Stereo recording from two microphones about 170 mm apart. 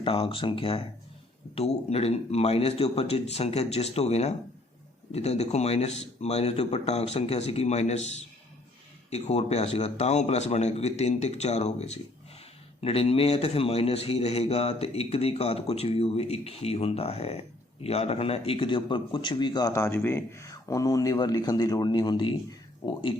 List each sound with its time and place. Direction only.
0.0 s a man's voice: 30° left (ahead or behind)